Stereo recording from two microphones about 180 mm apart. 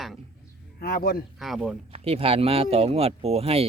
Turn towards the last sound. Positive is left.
turn(degrees=-35)  # may be behind; listen again after turning